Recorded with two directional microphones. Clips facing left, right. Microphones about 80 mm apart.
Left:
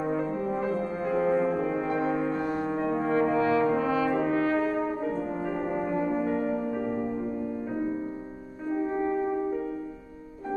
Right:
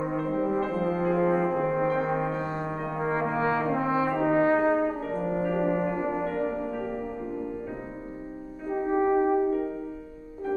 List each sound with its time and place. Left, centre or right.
0.0 s french horn: centre
0.9 s brass instrument: centre
1.6 s brass instrument: right
2.1 s music: centre
2.7 s brass instrument: centre
3.1 s brass instrument: right
5.4 s music: centre
6.2 s music: centre
8.7 s music: right